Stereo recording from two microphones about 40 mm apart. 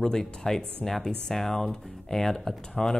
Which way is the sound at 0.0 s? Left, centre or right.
Centre.